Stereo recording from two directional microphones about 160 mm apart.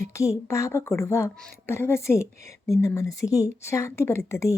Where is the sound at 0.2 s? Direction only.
20° left (ahead or behind).